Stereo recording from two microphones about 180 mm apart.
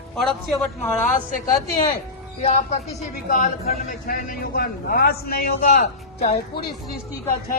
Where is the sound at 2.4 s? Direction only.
35° left (ahead or behind).